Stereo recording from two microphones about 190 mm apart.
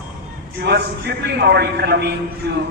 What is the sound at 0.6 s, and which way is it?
A man's voice, 60° right (ahead or behind).